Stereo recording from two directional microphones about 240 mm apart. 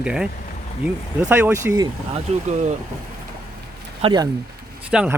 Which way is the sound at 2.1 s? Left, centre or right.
Right.